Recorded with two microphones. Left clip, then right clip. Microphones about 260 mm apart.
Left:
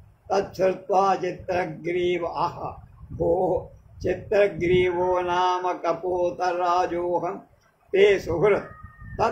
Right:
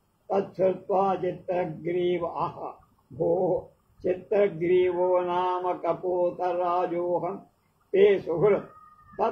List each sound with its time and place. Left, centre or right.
0.3 s speech: left
5.0 s mantra: left
6.3 s speech: left